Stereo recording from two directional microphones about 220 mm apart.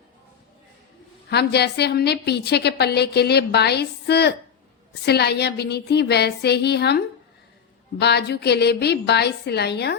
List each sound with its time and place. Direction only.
1.3 s a woman's voice: 50° left (ahead or behind)